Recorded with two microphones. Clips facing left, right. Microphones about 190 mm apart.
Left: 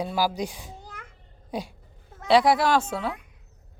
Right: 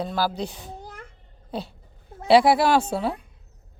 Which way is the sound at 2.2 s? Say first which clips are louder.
Right 3 dB; 5° right (ahead or behind).